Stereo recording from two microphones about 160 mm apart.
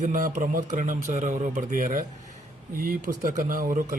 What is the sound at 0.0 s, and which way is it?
A man's voice, 55° right (ahead or behind).